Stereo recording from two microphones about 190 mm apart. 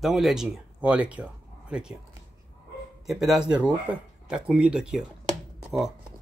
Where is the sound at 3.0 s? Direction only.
Centre (ahead or behind).